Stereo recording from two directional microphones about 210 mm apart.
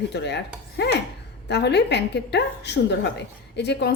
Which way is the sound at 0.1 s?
55° left (ahead or behind).